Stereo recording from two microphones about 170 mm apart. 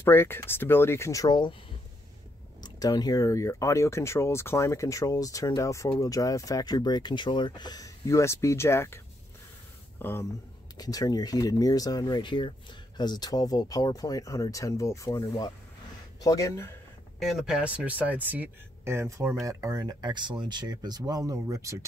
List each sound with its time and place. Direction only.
0.0 s speech: 15° left (ahead or behind)
2.6 s speech: 25° left (ahead or behind)
17.2 s speech: centre (ahead or behind); by 21.8 s 20° right (ahead or behind)